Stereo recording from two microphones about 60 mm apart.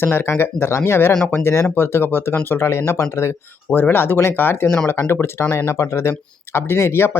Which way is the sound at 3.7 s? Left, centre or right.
Left.